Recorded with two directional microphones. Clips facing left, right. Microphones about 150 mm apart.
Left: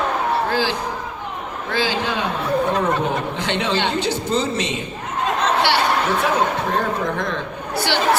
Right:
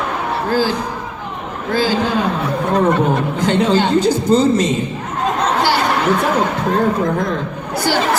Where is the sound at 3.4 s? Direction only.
40° right (ahead or behind).